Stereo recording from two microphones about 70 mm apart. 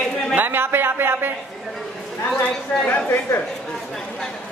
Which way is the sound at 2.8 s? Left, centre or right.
Left.